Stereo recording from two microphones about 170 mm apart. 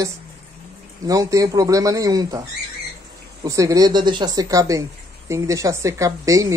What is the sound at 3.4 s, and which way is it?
Speech, 20° right (ahead or behind).